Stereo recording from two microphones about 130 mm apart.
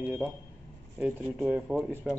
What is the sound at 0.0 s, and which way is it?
A man's voice, 10° right (ahead or behind).